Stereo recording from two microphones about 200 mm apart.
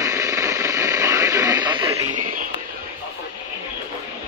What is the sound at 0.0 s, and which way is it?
Radio, 15° right (ahead or behind).